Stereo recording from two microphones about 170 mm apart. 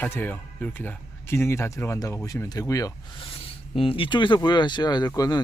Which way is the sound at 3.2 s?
35° left (ahead or behind).